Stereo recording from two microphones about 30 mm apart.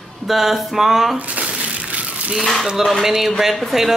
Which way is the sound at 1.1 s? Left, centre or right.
Right.